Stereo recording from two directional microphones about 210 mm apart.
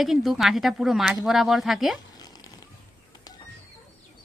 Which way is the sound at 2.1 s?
20° left (ahead or behind).